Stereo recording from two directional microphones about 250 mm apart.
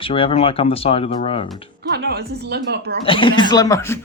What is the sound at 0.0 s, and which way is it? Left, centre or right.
Speech, left.